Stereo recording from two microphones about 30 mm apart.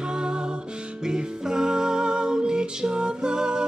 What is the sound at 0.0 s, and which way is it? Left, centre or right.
Music, right.